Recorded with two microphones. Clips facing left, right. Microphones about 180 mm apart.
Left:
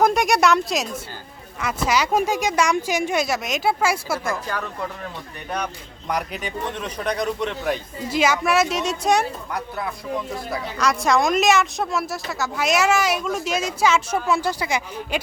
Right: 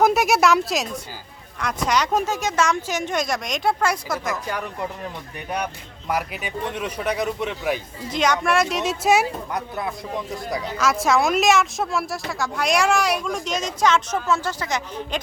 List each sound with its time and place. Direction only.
0.0 s speech: 5° right (ahead or behind)
4.4 s speech: 15° right (ahead or behind)
8.1 s a woman's voice: 5° left (ahead or behind)
9.5 s speech: 20° right (ahead or behind)
10.8 s a woman's voice: centre (ahead or behind)